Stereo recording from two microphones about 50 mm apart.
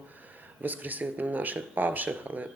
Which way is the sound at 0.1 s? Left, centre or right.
Right.